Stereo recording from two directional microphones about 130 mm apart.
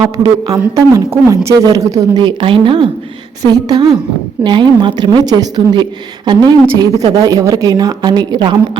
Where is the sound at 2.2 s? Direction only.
40° right (ahead or behind).